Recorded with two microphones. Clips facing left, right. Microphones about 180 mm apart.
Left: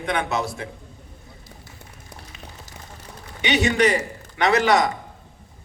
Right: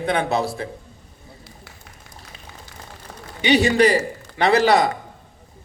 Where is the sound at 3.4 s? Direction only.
35° right (ahead or behind).